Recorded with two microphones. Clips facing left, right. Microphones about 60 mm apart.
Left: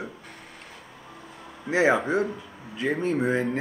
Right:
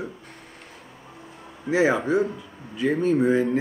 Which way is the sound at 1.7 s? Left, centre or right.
Left.